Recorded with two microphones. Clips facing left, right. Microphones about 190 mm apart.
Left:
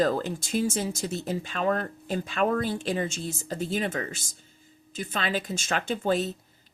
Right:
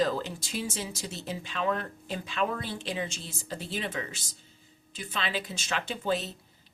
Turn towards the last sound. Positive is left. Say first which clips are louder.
# left 5 dB
turn(degrees=50)  # may be behind; listen again after turning